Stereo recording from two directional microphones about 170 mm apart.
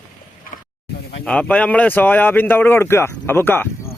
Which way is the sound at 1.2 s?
5° left (ahead or behind).